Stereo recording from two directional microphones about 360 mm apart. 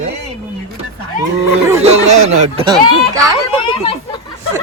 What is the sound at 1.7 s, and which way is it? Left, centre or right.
Speech, centre.